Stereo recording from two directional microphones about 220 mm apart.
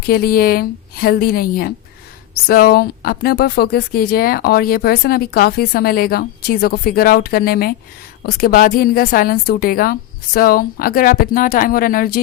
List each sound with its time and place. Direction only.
0.0 s a woman's voice: 45° left (ahead or behind)